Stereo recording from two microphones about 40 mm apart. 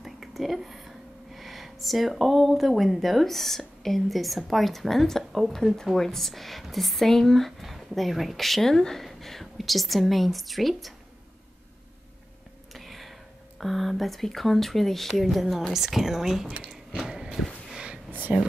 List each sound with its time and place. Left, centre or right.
0.0 s a woman's voice: centre
12.7 s a sound: centre
13.6 s speech: centre
15.2 s speech: centre
17.0 s a sound: centre
18.3 s speech: right